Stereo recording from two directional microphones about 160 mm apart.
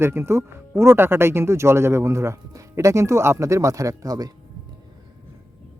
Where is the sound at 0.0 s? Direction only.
15° right (ahead or behind).